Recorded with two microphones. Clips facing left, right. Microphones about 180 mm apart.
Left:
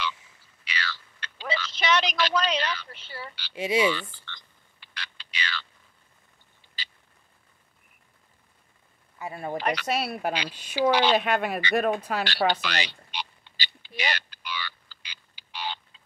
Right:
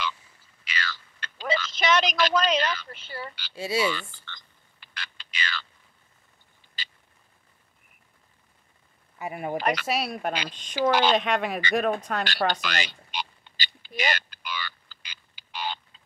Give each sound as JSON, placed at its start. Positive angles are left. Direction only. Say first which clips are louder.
{"t": 0.7, "sound": "a sound", "louder": "right 1 dB", "side_deg": -45}
{"t": 3.5, "sound": "speech", "louder": "left 3 dB", "side_deg": 20}
{"t": 3.8, "sound": "a sound", "louder": "left 2 dB", "side_deg": -45}
{"t": 9.2, "sound": "speech", "louder": "right 2 dB", "side_deg": -15}
{"t": 9.6, "sound": "speech", "louder": "right 1 dB", "side_deg": -45}
{"t": 9.8, "sound": "speech", "louder": "even", "side_deg": 0}
{"t": 12.6, "sound": "oink", "louder": "even", "side_deg": -45}